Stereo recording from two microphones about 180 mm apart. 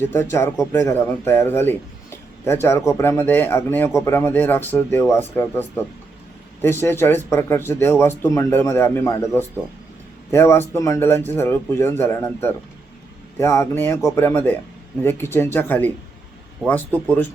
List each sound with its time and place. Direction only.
0.0 s speech: 15° left (ahead or behind)